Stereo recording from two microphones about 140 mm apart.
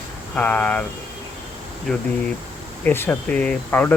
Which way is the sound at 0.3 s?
10° left (ahead or behind).